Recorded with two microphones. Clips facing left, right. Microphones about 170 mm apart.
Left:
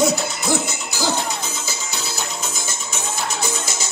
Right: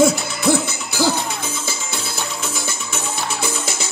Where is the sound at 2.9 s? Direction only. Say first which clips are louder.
Even; 55° right (ahead or behind).